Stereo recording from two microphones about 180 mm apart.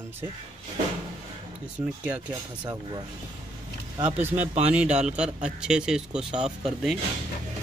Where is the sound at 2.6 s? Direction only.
20° right (ahead or behind).